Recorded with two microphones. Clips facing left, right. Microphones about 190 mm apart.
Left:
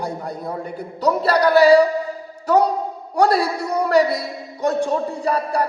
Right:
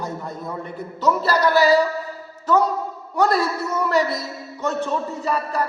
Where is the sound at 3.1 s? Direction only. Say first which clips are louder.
Left 2 dB; 30° left (ahead or behind).